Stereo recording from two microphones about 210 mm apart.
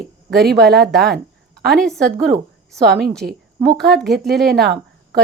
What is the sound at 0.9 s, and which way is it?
A woman's voice, centre (ahead or behind).